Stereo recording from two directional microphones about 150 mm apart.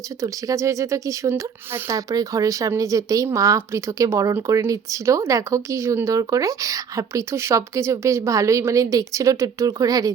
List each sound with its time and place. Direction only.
0.2 s speech: 20° right (ahead or behind)